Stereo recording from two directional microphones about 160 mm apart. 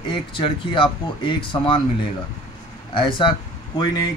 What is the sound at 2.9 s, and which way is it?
Speech, 30° left (ahead or behind).